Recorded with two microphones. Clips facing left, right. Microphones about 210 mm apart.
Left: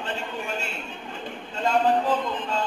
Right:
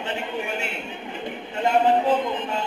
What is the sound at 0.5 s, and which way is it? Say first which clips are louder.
Speech: right 3 dB; 60° right (ahead or behind).